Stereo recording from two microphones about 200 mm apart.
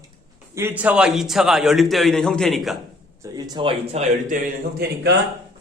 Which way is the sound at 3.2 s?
20° right (ahead or behind).